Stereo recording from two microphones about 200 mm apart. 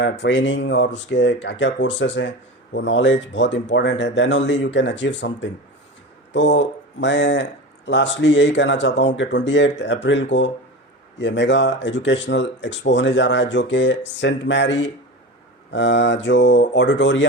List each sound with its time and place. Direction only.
0.0 s speech: 60° left (ahead or behind)